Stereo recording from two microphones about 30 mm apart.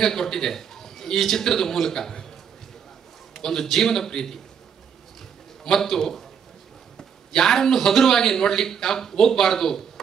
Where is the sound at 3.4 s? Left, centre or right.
Centre.